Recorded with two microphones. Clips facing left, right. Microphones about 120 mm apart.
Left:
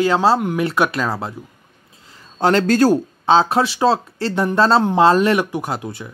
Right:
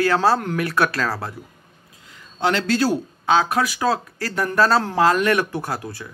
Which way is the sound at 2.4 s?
45° left (ahead or behind).